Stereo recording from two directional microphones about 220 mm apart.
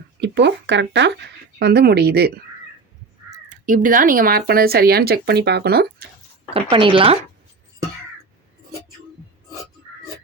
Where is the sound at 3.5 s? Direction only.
35° right (ahead or behind).